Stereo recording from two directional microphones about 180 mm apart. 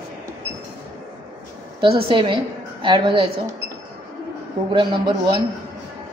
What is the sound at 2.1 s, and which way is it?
A woman's voice, 30° right (ahead or behind).